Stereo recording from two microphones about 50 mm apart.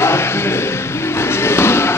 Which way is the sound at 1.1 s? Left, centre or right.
Left.